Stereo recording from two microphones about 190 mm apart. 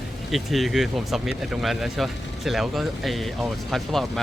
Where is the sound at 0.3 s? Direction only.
Centre (ahead or behind).